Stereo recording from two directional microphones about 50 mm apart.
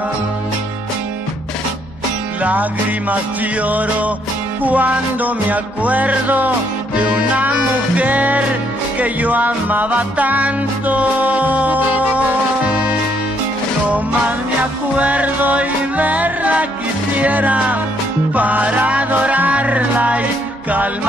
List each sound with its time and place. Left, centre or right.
3.6 s music: right
13.8 s music: right